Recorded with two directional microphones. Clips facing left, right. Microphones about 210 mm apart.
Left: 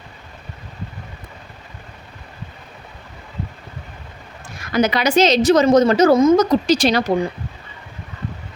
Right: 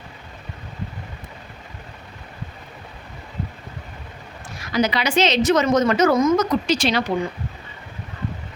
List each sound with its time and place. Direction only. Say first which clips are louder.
4.7 s a woman's voice: left 4 dB; 50° left (ahead or behind)